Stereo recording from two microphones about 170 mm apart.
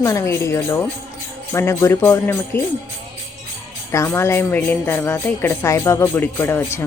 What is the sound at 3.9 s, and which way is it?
Speech, 15° left (ahead or behind).